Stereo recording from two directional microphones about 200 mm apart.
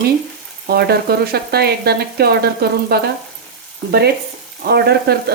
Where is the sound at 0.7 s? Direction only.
50° right (ahead or behind).